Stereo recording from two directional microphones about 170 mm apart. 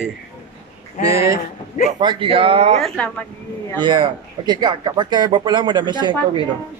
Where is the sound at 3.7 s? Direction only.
25° right (ahead or behind).